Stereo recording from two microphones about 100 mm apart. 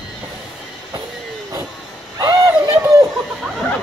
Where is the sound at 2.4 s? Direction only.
35° right (ahead or behind).